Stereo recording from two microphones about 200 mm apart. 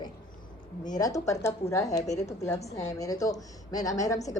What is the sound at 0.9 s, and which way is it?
A woman's voice, 15° left (ahead or behind).